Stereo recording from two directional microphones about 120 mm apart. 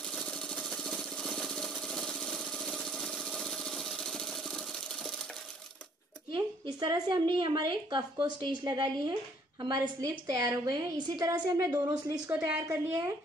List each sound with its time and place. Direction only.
0.0 s jackhammer: 5° left (ahead or behind)
6.3 s a woman's voice: 40° right (ahead or behind)